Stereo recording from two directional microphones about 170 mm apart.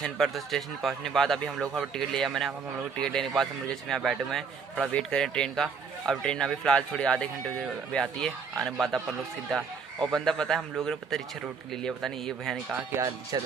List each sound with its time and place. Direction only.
0.0 s a man's voice: centre (ahead or behind)
10.0 s a man's voice: centre (ahead or behind)
12.9 s speech: 20° right (ahead or behind)